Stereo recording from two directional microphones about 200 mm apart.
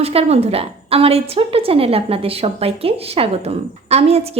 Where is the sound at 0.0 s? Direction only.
30° right (ahead or behind).